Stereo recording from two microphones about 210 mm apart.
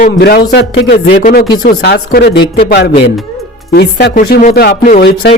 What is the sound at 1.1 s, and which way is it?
Speech, 40° left (ahead or behind).